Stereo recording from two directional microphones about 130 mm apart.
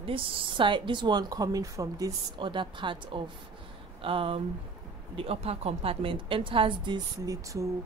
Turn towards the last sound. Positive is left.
turn(degrees=-25)  # may be behind; listen again after turning